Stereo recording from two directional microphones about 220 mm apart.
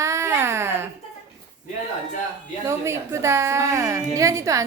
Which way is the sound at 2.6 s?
15° right (ahead or behind).